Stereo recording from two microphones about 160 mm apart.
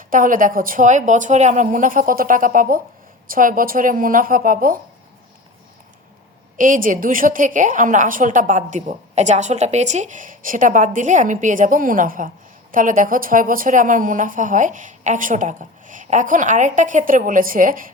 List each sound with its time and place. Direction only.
0.1 s a woman's voice: 60° right (ahead or behind)
6.6 s a woman's voice: 60° right (ahead or behind)